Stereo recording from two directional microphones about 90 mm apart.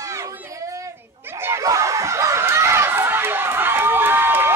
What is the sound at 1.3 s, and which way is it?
Crowd, 30° right (ahead or behind).